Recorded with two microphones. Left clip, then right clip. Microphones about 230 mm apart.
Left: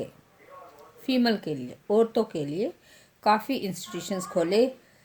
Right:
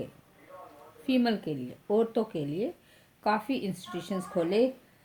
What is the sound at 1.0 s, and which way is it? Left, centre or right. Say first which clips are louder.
A woman's voice: left 3 dB; left.